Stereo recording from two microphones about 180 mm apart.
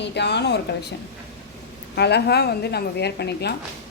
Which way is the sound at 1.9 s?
65° left (ahead or behind).